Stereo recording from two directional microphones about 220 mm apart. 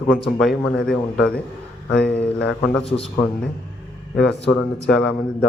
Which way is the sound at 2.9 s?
25° left (ahead or behind).